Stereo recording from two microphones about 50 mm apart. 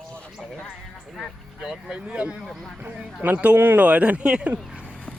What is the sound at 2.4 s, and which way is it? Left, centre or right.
Speech, centre.